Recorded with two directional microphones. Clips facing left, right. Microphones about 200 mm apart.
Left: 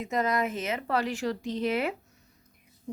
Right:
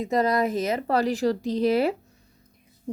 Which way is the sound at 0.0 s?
35° right (ahead or behind).